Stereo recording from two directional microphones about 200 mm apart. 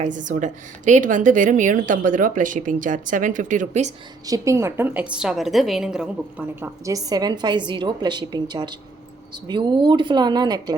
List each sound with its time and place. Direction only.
0.0 s a woman's voice: 40° right (ahead or behind)
4.3 s a woman's voice: 15° right (ahead or behind)